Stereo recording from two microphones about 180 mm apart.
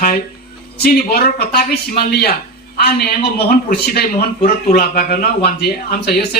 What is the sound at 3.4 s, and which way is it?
Speech, 60° left (ahead or behind).